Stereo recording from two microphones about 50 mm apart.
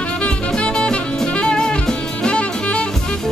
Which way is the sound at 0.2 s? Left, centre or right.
Centre.